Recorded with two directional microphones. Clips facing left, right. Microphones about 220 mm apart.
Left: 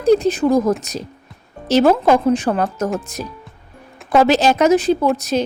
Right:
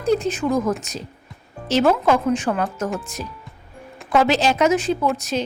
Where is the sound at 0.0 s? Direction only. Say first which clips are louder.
Left 6 dB; 35° left (ahead or behind).